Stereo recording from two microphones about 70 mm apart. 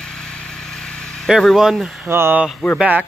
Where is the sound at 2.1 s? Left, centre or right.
Right.